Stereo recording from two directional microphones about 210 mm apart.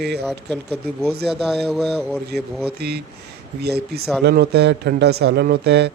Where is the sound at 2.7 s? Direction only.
50° right (ahead or behind).